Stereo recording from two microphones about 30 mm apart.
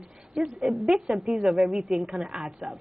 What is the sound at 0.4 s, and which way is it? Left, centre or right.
A woman's voice, right.